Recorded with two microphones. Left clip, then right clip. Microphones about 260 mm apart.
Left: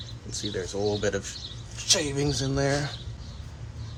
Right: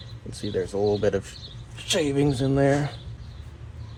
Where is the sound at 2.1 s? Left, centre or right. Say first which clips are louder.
Right 5 dB; right.